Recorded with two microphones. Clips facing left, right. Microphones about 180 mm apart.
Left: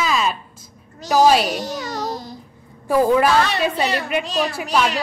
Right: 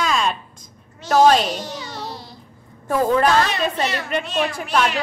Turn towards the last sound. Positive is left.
turn(degrees=5)  # may be behind; listen again after turning